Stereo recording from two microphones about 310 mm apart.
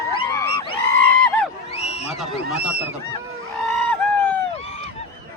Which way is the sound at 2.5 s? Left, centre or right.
Centre.